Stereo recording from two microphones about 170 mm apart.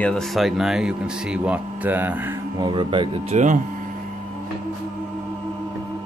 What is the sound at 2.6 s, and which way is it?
Speech, 25° right (ahead or behind).